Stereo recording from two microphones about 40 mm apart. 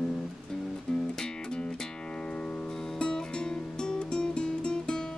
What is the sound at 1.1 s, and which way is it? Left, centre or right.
Music, centre.